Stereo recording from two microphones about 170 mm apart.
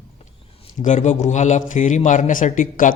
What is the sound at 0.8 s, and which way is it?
A man's voice, 45° left (ahead or behind).